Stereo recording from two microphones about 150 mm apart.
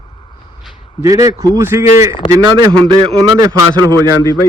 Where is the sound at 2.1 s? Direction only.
35° left (ahead or behind).